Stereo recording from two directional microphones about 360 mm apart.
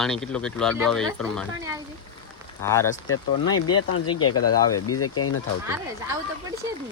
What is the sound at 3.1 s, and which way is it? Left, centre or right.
Speech, left.